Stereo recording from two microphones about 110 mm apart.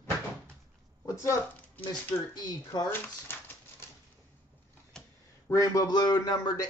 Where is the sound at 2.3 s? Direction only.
35° left (ahead or behind).